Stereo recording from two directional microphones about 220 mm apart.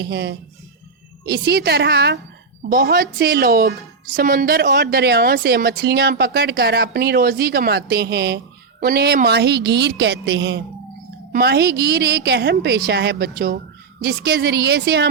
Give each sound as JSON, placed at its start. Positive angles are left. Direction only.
{"t": 0.0, "sound": "a woman's voice", "side_deg": -50}